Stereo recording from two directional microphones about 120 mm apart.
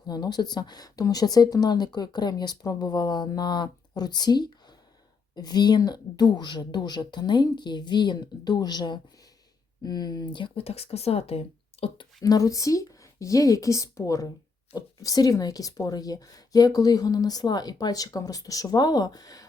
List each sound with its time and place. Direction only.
0.1 s speech: 35° left (ahead or behind); by 12.0 s 55° left (ahead or behind)
12.2 s speech: 30° left (ahead or behind)